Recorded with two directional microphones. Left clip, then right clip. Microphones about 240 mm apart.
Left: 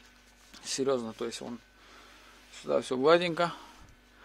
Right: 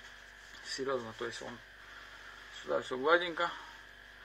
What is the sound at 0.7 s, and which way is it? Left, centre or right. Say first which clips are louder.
Speech: left 6 dB; left.